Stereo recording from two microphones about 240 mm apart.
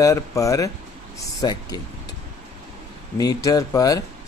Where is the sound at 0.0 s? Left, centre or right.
Centre.